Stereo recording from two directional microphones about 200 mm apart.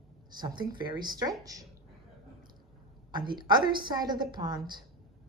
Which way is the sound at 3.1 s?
20° right (ahead or behind).